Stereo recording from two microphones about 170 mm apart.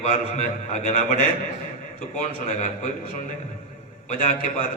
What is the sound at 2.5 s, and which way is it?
Speech, 45° left (ahead or behind).